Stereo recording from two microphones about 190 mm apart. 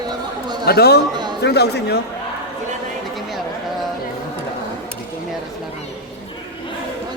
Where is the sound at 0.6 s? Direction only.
55° left (ahead or behind).